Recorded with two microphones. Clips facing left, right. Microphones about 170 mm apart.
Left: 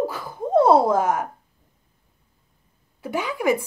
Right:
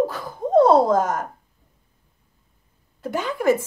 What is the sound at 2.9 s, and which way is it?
Speech, 10° left (ahead or behind).